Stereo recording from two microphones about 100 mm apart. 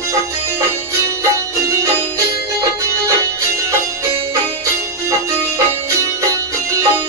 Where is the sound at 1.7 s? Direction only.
30° right (ahead or behind).